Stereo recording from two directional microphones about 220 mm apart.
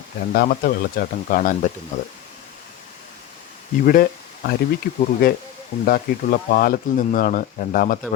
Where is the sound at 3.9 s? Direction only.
40° left (ahead or behind).